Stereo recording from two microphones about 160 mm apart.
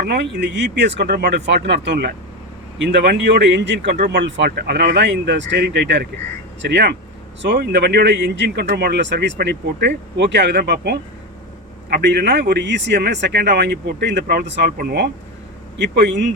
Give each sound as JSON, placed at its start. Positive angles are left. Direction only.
{"t": 0.0, "sound": "speech", "side_deg": -90}